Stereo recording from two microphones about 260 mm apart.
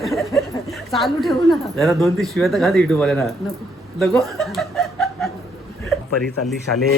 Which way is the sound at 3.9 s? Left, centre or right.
Centre.